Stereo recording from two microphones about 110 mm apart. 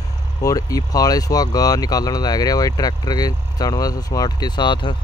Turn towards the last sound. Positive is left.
turn(degrees=40)  # may be behind; listen again after turning